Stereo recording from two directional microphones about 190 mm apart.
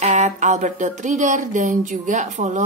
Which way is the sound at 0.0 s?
40° right (ahead or behind).